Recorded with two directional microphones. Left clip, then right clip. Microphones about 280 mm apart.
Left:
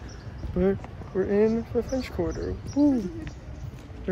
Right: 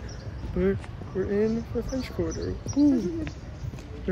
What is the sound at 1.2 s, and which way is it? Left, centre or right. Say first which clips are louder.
Speech: left 3 dB; left.